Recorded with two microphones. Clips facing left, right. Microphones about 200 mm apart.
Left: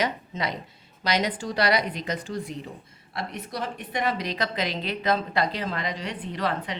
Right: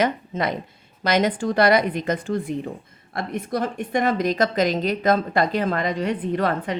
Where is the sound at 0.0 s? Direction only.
50° right (ahead or behind).